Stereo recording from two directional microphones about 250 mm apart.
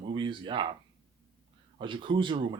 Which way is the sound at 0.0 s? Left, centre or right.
Centre.